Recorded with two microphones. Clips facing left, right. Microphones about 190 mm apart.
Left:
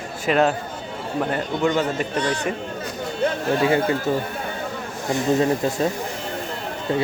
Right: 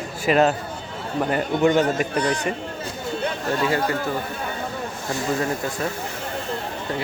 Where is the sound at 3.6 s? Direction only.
25° left (ahead or behind).